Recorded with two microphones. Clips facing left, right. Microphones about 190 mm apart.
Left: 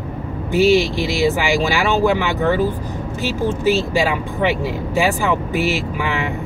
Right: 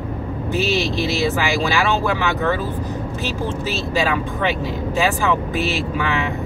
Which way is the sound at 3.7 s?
10° left (ahead or behind).